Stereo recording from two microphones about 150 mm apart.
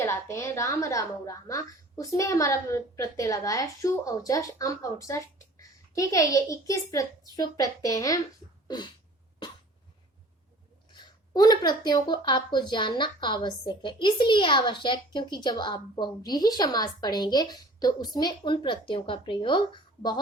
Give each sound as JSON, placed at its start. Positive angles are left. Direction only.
{"t": 0.0, "sound": "a woman's voice", "side_deg": 20}
{"t": 8.6, "sound": "a sound", "side_deg": 30}
{"t": 10.9, "sound": "a woman's voice", "side_deg": 25}